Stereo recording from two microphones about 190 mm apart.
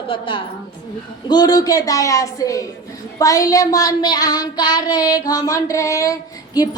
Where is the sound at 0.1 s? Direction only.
25° left (ahead or behind).